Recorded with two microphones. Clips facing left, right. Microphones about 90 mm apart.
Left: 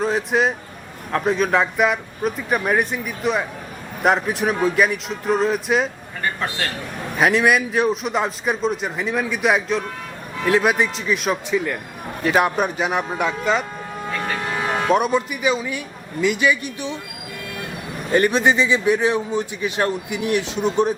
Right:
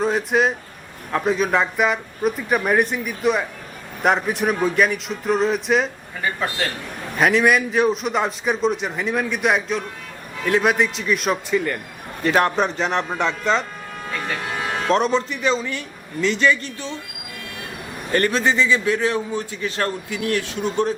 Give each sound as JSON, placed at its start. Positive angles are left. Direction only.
{"t": 0.0, "sound": "a man's voice", "side_deg": 0}
{"t": 14.8, "sound": "a man's voice", "side_deg": 10}
{"t": 18.1, "sound": "a man's voice", "side_deg": 15}